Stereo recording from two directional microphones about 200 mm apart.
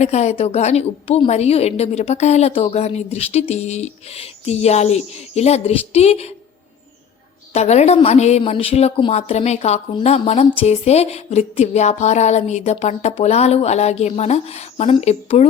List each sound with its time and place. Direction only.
0.0 s a woman's voice: 35° left (ahead or behind)
7.5 s a woman's voice: 35° left (ahead or behind)